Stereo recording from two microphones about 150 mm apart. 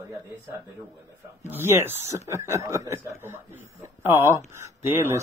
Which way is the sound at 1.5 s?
15° right (ahead or behind).